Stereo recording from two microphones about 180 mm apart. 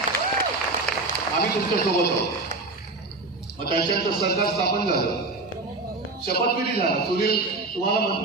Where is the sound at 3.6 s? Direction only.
55° left (ahead or behind).